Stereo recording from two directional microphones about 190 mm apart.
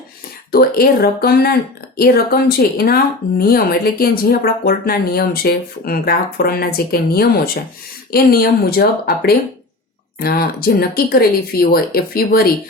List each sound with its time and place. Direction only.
0.5 s speech: 55° left (ahead or behind)